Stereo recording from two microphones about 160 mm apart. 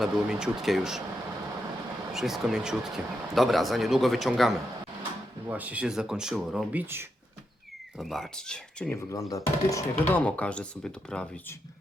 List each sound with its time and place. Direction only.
0.0 s speech: 5° right (ahead or behind)
2.1 s speech: centre (ahead or behind)
7.9 s speech: centre (ahead or behind)
8.9 s speech: 20° left (ahead or behind)
10.2 s speech: 10° left (ahead or behind)